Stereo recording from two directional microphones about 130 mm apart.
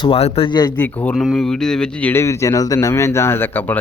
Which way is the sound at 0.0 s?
50° left (ahead or behind).